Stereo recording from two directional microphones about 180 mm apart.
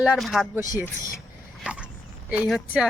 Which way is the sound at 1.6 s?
5° right (ahead or behind).